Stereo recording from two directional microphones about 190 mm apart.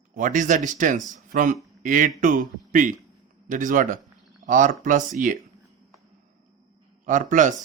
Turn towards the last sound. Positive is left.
turn(degrees=-45)  # may be behind; listen again after turning